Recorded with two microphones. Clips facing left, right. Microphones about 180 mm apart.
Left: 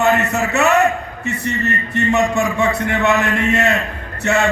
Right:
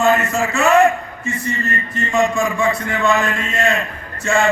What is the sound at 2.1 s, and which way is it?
Music, 65° left (ahead or behind).